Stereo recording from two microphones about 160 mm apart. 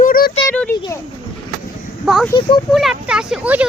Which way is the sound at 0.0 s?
65° left (ahead or behind).